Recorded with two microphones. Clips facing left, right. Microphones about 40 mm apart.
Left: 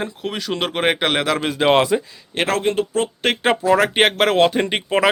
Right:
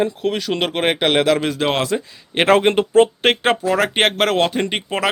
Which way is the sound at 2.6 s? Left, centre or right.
Right.